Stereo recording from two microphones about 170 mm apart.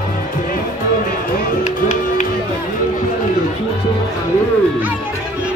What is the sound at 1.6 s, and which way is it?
Music, 45° left (ahead or behind).